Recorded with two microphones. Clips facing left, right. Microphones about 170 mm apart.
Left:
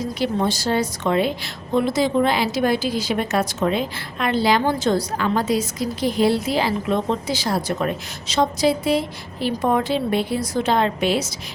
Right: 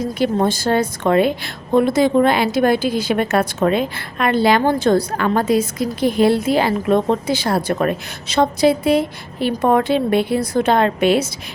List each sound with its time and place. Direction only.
0.2 s a woman's voice: 50° right (ahead or behind)